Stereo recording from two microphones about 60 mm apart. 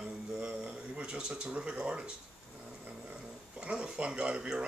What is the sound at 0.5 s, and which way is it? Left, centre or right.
Speech, centre.